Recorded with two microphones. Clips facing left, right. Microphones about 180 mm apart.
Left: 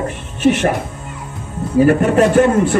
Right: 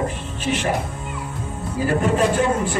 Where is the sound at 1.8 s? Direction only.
60° left (ahead or behind).